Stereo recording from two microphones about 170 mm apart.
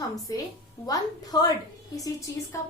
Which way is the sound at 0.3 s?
20° left (ahead or behind).